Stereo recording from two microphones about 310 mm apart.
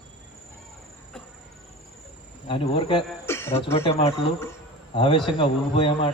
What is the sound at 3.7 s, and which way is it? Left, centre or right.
Speech, centre.